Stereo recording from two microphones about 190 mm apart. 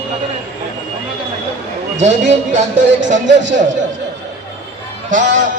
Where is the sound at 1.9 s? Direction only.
35° right (ahead or behind).